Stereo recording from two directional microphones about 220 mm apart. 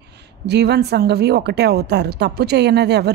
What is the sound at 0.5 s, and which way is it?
A woman's voice, 50° right (ahead or behind).